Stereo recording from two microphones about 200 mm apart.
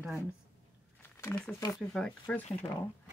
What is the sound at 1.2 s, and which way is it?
Speech, 10° left (ahead or behind).